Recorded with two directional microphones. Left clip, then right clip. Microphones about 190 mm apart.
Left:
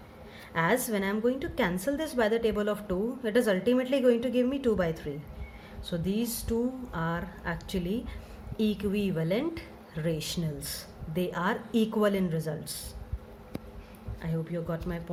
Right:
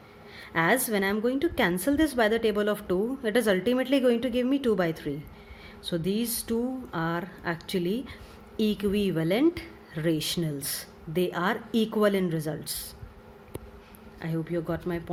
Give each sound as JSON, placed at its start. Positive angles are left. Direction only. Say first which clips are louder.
{"t": 0.5, "sound": "a woman's voice", "louder": "right 3 dB", "side_deg": -45}
{"t": 6.1, "sound": "a woman's voice", "louder": "right 1 dB", "side_deg": -45}
{"t": 14.2, "sound": "a woman's voice", "louder": "right 4 dB", "side_deg": -50}